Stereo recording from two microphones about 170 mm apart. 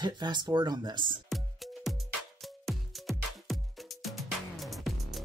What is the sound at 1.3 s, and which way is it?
Music, centre (ahead or behind).